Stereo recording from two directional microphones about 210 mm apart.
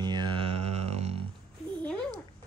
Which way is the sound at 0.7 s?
30° right (ahead or behind).